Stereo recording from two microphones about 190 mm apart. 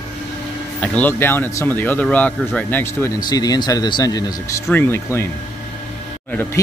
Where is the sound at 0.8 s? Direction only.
10° left (ahead or behind).